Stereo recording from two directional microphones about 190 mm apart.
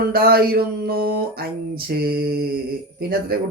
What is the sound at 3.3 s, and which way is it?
Speech, 55° right (ahead or behind).